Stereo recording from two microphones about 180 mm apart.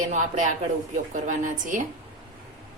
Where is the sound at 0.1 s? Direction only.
40° right (ahead or behind).